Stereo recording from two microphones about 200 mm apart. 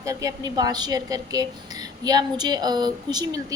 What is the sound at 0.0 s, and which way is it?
A woman's voice, 15° right (ahead or behind).